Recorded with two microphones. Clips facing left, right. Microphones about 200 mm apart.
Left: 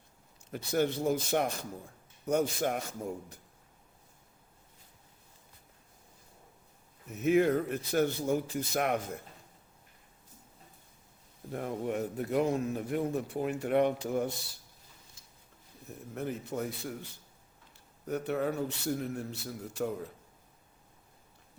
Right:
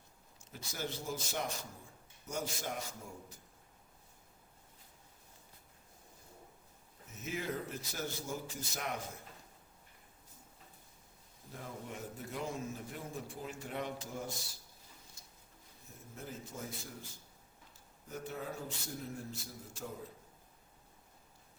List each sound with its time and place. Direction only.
0.5 s a man's voice: 60° left (ahead or behind)
7.1 s a man's voice: 60° left (ahead or behind)
11.5 s a man's voice: 60° left (ahead or behind)
16.1 s a man's voice: 65° left (ahead or behind)